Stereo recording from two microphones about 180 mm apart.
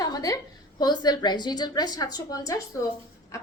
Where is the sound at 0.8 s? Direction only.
20° left (ahead or behind).